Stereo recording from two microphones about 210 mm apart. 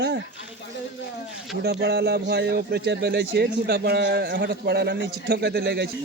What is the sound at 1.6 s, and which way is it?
Speech, 50° right (ahead or behind).